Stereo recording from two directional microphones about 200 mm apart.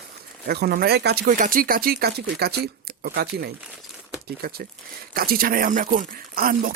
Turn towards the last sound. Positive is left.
turn(degrees=-45)  # may be behind; listen again after turning